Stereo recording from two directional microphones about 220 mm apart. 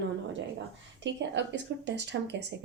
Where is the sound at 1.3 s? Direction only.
50° right (ahead or behind).